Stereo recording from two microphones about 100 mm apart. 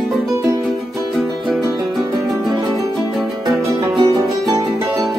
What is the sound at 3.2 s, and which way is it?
Music, centre (ahead or behind).